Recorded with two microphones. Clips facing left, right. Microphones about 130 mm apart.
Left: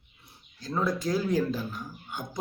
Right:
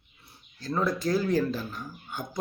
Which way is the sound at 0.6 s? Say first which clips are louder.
Right 1 dB; 15° left (ahead or behind).